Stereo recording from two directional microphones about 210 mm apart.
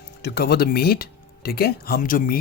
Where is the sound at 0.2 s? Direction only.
50° left (ahead or behind).